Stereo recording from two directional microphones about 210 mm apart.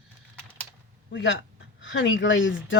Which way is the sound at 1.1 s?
60° left (ahead or behind).